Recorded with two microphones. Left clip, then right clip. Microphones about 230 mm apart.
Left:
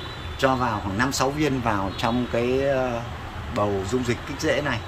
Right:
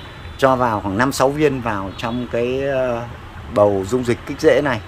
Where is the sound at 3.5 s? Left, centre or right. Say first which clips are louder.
Right 9 dB; right.